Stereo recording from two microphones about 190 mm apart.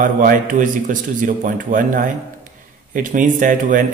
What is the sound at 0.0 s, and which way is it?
Speech, 45° right (ahead or behind).